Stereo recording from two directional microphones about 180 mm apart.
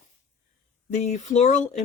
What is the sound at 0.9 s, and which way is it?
Speech, 40° left (ahead or behind).